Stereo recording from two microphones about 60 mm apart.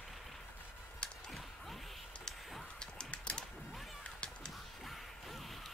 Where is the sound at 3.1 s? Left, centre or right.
Centre.